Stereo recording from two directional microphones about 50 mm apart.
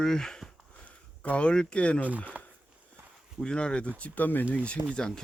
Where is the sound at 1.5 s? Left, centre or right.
Centre.